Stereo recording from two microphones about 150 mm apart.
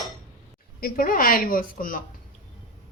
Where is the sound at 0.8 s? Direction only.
75° left (ahead or behind).